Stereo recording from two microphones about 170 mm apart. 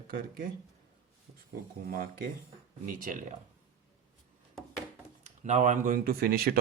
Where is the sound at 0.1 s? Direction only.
60° right (ahead or behind).